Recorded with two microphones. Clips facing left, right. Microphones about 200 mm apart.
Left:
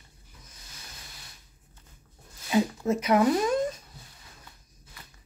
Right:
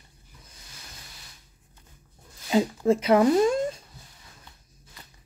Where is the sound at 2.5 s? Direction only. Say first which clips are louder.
Right 3 dB; 30° right (ahead or behind).